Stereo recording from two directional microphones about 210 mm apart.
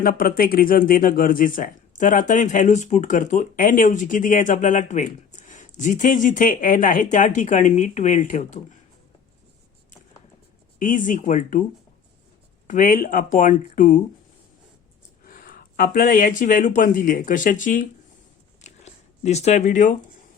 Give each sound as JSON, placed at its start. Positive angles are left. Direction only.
{"t": 0.0, "sound": "speech", "side_deg": 40}
{"t": 10.8, "sound": "speech", "side_deg": 40}
{"t": 12.6, "sound": "speech", "side_deg": 40}
{"t": 15.2, "sound": "speech", "side_deg": 40}
{"t": 18.6, "sound": "a sound", "side_deg": 30}